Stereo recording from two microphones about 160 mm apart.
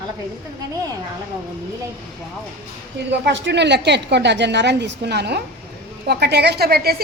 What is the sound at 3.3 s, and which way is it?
A woman's voice, 90° right.